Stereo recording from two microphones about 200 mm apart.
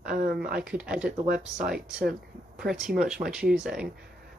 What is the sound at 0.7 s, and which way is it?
Speech, 5° right (ahead or behind).